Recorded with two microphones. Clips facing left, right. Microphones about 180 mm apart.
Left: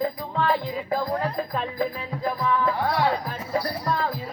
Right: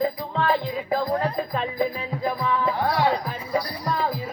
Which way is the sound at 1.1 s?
10° right (ahead or behind).